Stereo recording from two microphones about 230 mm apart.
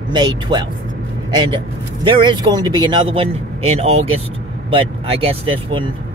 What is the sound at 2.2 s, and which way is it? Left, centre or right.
Speech, centre.